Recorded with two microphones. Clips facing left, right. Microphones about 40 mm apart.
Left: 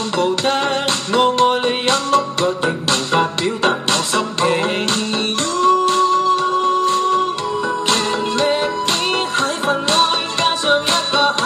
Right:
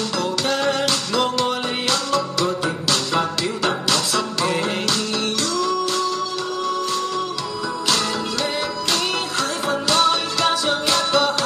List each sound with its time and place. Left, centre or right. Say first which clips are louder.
0.2 s music: left 5 dB; left